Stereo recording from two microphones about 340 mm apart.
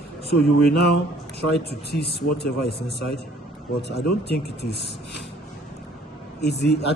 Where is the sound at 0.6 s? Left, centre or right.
Left.